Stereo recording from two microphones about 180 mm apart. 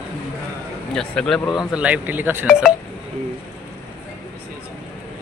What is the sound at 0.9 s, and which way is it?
Speech, 5° left (ahead or behind).